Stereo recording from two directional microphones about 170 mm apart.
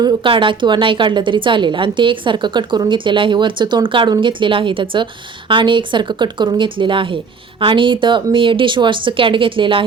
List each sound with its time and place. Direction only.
0.0 s a woman's voice: 30° right (ahead or behind)